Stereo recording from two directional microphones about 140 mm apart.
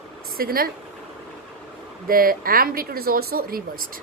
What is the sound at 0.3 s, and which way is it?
Speech, 90° right.